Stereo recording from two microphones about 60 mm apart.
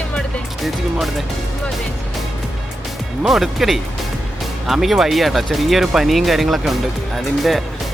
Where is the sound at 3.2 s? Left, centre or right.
Centre.